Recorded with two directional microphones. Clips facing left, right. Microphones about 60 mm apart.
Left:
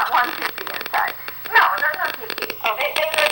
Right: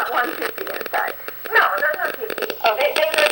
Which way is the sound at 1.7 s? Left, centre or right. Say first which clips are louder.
Right 1 dB; left.